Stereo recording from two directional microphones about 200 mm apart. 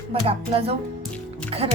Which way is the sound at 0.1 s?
30° right (ahead or behind).